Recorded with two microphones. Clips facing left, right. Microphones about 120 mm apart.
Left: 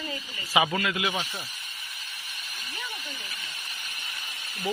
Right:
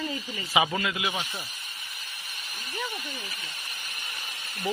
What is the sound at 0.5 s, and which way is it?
Speech, 5° right (ahead or behind).